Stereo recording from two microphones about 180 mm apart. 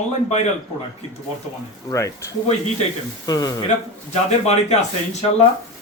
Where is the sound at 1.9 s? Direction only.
15° left (ahead or behind).